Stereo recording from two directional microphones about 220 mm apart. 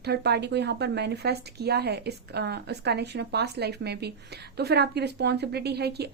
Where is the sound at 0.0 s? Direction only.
50° right (ahead or behind).